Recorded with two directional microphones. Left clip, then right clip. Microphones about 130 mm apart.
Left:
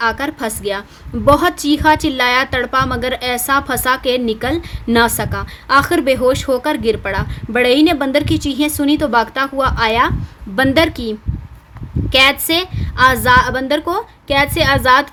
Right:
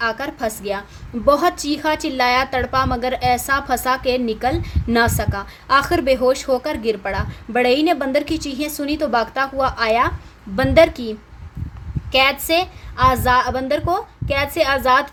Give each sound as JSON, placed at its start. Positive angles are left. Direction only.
{"t": 0.0, "sound": "a woman's voice", "side_deg": 50}
{"t": 12.1, "sound": "a woman's voice", "side_deg": 50}